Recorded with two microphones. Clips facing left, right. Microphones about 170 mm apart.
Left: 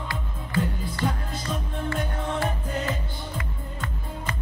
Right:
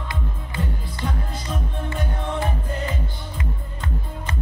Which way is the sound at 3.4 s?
25° right (ahead or behind).